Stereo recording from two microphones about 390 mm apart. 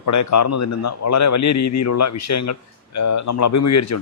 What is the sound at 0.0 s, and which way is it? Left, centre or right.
A man's voice, left.